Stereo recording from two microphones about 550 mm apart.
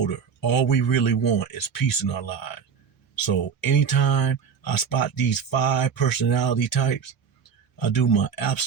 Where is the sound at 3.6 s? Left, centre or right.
Left.